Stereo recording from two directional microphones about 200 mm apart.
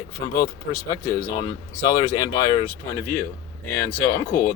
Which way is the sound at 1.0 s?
20° left (ahead or behind).